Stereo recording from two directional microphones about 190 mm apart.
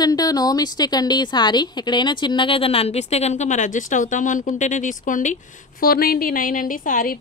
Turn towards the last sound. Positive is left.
turn(degrees=45)  # may be behind; listen again after turning